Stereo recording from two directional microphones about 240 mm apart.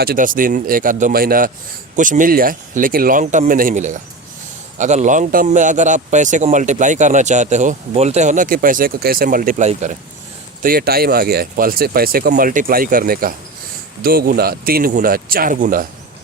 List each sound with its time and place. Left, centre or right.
0.0 s a man's voice: right